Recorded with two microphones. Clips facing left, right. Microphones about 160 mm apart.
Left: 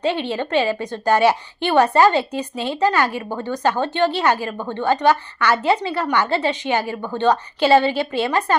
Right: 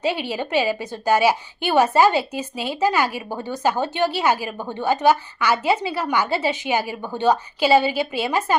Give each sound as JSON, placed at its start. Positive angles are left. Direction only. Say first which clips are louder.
{"t": 0.0, "sound": "a woman's voice", "louder": "left 2 dB", "side_deg": -5}